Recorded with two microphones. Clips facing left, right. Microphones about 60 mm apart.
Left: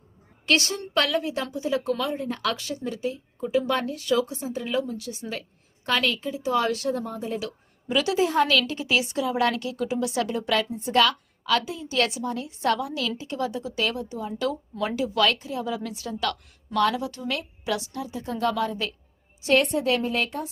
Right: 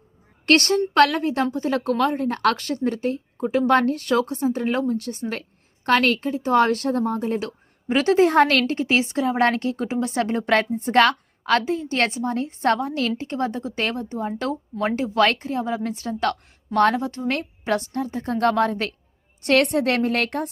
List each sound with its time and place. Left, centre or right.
0.4 s a woman's voice: right